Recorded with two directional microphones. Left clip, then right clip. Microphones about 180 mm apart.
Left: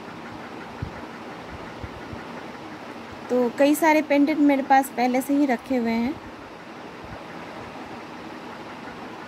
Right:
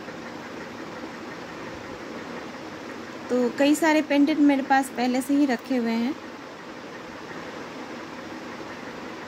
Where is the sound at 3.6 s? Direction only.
15° left (ahead or behind).